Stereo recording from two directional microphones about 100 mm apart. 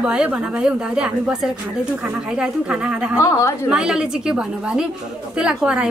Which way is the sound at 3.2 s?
30° left (ahead or behind).